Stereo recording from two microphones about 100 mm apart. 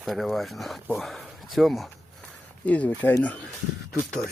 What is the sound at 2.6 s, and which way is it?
Speech, 15° left (ahead or behind).